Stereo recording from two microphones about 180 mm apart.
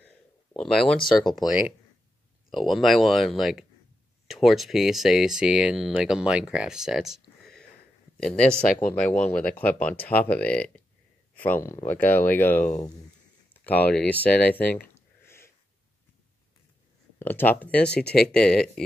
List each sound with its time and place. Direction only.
0.0 s a sound: 5° left (ahead or behind)
2.5 s speech: centre (ahead or behind)
13.5 s a sound: 10° left (ahead or behind)
17.2 s speech: 10° left (ahead or behind)
17.9 s speech: 60° left (ahead or behind)
18.3 s speech: 5° left (ahead or behind)